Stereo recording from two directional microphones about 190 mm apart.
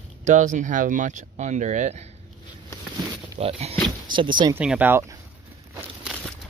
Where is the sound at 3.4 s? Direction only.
30° right (ahead or behind).